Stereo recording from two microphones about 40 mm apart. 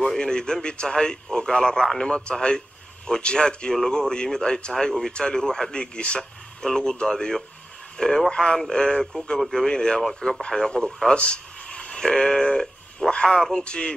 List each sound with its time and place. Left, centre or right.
0.0 s speech: centre
13.7 s speech: left